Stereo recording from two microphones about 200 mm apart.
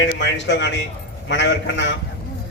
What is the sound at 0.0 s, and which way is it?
A man's voice, 60° left (ahead or behind).